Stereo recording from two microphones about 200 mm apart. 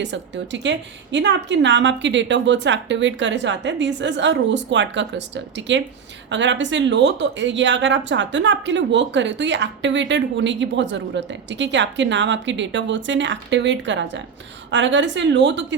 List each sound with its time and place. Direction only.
0.0 s speech: 60° right (ahead or behind)